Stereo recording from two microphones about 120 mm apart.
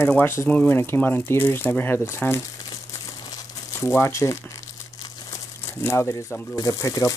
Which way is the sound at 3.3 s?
20° left (ahead or behind).